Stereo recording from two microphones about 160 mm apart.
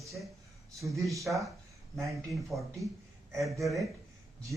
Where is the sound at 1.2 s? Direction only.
Centre (ahead or behind).